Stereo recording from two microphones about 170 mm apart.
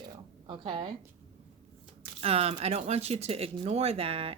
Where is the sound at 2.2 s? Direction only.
35° right (ahead or behind).